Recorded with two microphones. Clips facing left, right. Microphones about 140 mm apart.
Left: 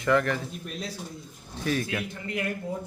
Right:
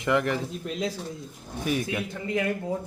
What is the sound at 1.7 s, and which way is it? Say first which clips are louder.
Speech: right 1 dB; 20° right (ahead or behind).